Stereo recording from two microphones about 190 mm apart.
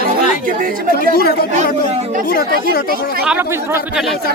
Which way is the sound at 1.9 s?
35° right (ahead or behind).